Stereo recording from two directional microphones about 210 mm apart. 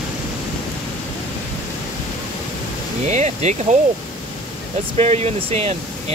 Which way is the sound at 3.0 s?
35° right (ahead or behind).